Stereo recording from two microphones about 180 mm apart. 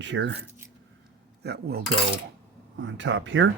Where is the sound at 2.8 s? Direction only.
90° right.